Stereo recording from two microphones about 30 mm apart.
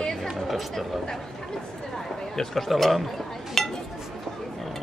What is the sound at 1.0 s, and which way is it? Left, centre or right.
Speech, centre.